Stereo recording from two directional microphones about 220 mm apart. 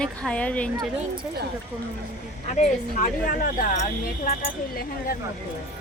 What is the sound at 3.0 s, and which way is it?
Speech, 35° left (ahead or behind).